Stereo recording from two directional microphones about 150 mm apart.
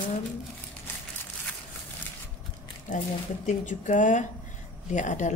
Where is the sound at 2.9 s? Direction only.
55° left (ahead or behind).